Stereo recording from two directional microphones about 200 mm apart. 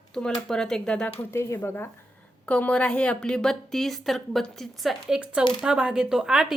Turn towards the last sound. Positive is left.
turn(degrees=-5)  # may be behind; listen again after turning